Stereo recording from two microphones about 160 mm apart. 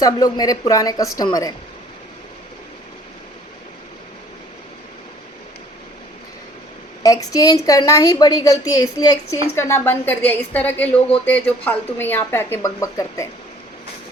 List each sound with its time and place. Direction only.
0.0 s a woman's voice: 25° left (ahead or behind)
7.0 s a woman's voice: 20° left (ahead or behind)